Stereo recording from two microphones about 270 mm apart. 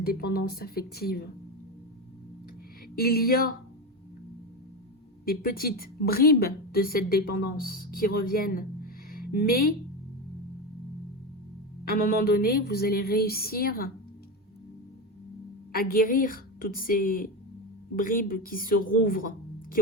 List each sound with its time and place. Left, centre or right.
0.0 s a woman's voice: left
2.9 s a woman's voice: left
5.2 s a woman's voice: left
11.9 s a woman's voice: left
15.7 s a woman's voice: left